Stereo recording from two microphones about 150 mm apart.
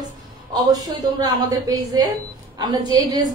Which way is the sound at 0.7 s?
25° right (ahead or behind).